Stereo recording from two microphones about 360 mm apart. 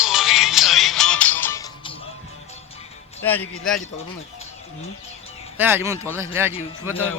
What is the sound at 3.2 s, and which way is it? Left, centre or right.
Speech, centre.